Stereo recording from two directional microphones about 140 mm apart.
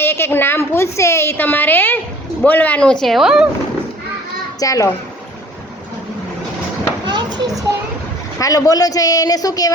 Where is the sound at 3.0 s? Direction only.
Centre (ahead or behind).